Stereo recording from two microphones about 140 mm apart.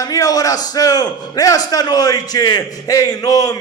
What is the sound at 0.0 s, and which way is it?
A man's voice, 25° left (ahead or behind).